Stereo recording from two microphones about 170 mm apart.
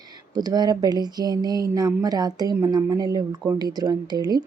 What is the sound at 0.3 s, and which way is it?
A woman's voice, 25° right (ahead or behind).